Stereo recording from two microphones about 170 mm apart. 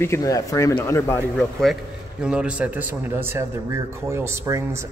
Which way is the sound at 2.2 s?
5° right (ahead or behind).